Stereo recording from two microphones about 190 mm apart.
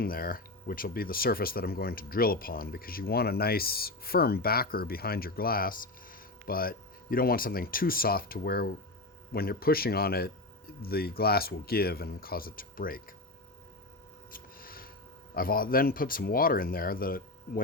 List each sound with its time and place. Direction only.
0.0 s speech: 50° left (ahead or behind)
14.3 s a sound: 50° left (ahead or behind)
15.4 s speech: 50° left (ahead or behind)